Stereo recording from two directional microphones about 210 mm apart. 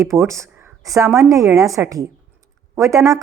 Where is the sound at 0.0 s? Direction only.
15° right (ahead or behind).